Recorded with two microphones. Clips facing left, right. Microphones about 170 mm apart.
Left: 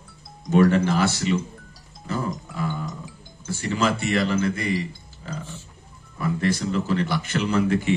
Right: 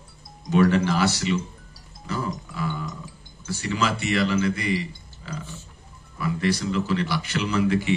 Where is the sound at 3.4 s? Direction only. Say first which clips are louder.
Left 2 dB; 50° left (ahead or behind).